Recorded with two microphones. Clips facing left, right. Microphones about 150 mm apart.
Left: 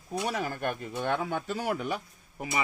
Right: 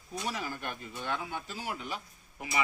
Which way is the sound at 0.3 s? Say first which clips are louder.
Left 5 dB; 55° left (ahead or behind).